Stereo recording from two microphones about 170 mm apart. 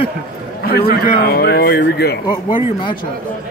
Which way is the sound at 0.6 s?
65° left (ahead or behind).